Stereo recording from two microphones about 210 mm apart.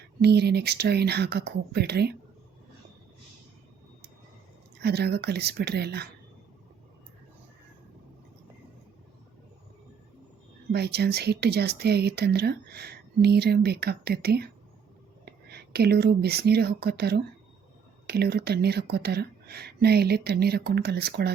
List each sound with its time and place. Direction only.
0.2 s speech: 50° right (ahead or behind)
4.8 s speech: 50° right (ahead or behind)
10.7 s speech: 50° right (ahead or behind)